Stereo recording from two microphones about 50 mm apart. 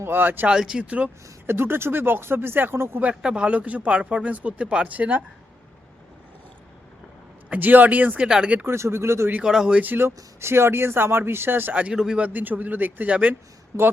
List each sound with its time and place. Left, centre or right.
0.0 s speech: right
0.4 s speech: centre
1.5 s speech: right
3.2 s speech: centre
7.5 s speech: right
8.2 s speech: centre
8.6 s speech: right
9.4 s speech: centre
9.8 s speech: right
11.7 s speech: right
11.9 s speech: centre
12.2 s speech: right
13.7 s speech: right